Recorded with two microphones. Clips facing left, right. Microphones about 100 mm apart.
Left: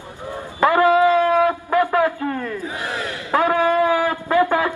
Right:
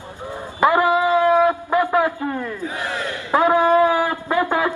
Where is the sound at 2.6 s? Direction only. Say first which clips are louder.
Right 1 dB; 20° left (ahead or behind).